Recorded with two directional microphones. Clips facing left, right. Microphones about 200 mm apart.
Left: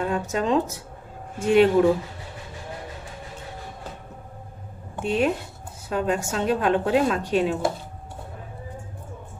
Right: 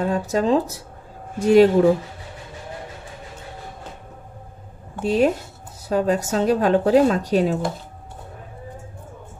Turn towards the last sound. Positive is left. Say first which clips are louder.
# right 3 dB
turn(degrees=-40)  # may be behind; listen again after turning